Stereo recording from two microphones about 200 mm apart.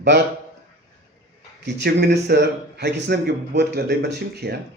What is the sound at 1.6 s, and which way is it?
A man's voice, 55° right (ahead or behind).